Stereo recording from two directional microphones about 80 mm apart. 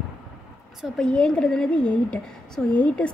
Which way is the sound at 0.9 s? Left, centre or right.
Centre.